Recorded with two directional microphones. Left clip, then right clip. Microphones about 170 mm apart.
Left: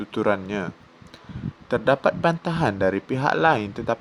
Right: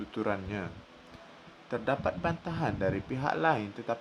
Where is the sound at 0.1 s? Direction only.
40° left (ahead or behind).